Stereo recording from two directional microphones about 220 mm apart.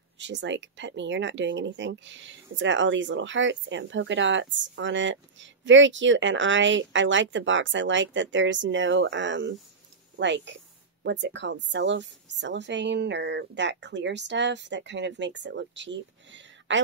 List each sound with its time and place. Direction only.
0.2 s a woman's voice: 55° right (ahead or behind)